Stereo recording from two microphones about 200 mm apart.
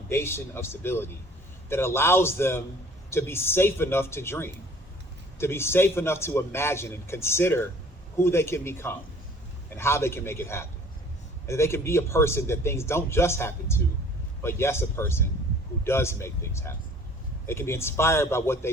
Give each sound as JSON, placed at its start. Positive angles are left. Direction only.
{"t": 0.1, "sound": "a man's voice", "side_deg": 10}